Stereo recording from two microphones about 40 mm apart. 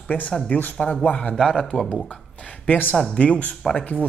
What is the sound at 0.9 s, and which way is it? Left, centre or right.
Speech, left.